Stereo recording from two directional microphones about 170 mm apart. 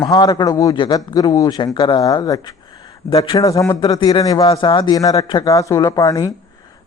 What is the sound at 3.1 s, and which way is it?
Speech, 35° left (ahead or behind).